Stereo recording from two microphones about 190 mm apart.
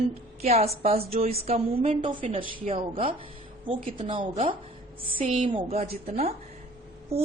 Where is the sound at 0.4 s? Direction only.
35° right (ahead or behind).